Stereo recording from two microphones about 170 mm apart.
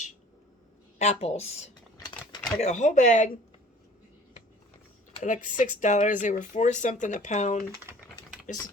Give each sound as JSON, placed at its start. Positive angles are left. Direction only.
{"t": 0.9, "sound": "speech", "side_deg": 45}
{"t": 5.2, "sound": "speech", "side_deg": 50}